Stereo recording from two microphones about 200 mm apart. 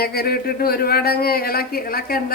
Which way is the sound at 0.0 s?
50° left (ahead or behind).